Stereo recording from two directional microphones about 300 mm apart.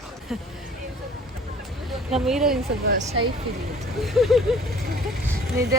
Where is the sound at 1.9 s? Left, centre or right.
Centre.